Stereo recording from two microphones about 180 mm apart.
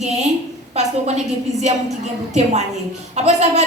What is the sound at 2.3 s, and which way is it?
A woman's voice, 40° right (ahead or behind).